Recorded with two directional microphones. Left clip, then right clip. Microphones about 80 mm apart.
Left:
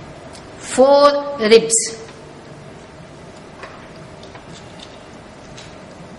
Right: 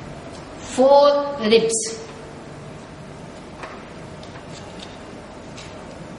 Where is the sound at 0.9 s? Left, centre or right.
Left.